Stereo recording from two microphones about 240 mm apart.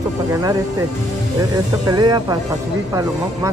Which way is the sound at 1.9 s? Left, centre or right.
Centre.